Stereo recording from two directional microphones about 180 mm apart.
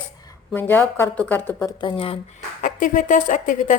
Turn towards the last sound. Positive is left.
turn(degrees=45)  # may be behind; listen again after turning